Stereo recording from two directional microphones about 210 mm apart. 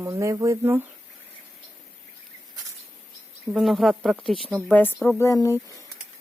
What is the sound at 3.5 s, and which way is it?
Speech, centre (ahead or behind).